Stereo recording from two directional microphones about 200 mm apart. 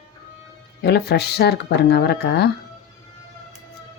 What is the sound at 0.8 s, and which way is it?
Speech, 55° left (ahead or behind).